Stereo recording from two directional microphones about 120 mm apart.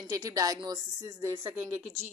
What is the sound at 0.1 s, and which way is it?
A woman's voice, 30° right (ahead or behind).